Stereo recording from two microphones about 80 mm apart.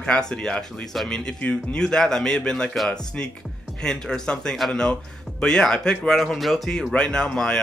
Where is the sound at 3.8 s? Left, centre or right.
Centre.